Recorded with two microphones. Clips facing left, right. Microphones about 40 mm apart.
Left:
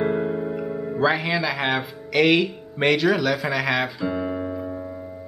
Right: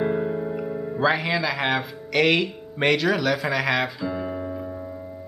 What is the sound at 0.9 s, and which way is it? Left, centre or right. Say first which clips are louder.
Speech: left 1 dB; centre.